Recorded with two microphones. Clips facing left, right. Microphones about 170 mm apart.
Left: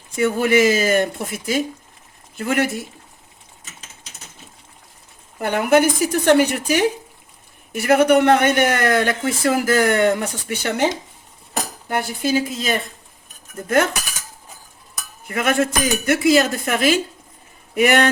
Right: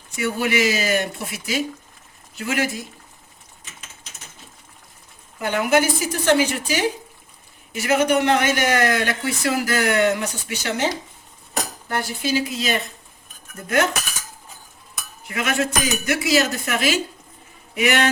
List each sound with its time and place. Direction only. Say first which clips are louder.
0.2 s speech: left 5 dB; 50° left (ahead or behind)
5.4 s speech: left 3 dB; 55° left (ahead or behind)
12.2 s speech: left 2 dB; 50° left (ahead or behind)
15.3 s speech: left 4 dB; 50° left (ahead or behind)